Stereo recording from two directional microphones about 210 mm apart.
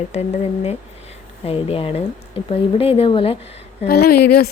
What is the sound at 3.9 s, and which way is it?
Speech, 50° left (ahead or behind).